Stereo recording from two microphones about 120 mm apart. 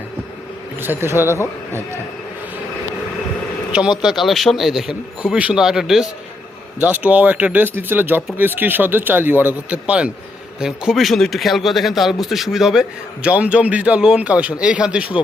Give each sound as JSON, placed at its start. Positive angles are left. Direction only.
{"t": 0.8, "sound": "speech", "side_deg": -15}
{"t": 3.7, "sound": "a man's voice", "side_deg": -5}
{"t": 6.8, "sound": "a man's voice", "side_deg": -15}